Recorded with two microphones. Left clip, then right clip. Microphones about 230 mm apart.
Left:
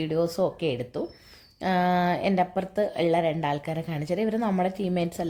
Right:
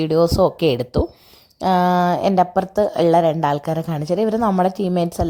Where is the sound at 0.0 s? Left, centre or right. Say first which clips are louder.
Right 10 dB; right.